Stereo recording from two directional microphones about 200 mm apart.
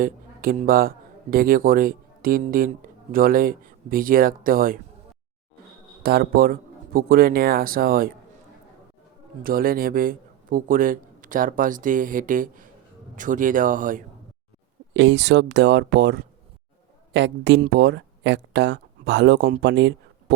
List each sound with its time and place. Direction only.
0.0 s a man's voice: 45° right (ahead or behind)
6.0 s a man's voice: 50° right (ahead or behind)
9.4 s a man's voice: 45° right (ahead or behind)
14.9 s speech: 60° right (ahead or behind)